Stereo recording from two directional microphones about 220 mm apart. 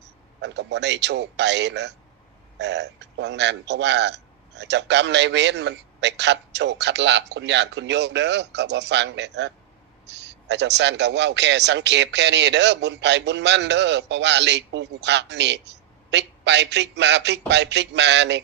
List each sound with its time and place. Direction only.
0.4 s speech: 50° right (ahead or behind)